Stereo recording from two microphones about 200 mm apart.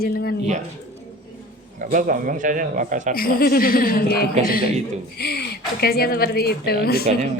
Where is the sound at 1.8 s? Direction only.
40° right (ahead or behind).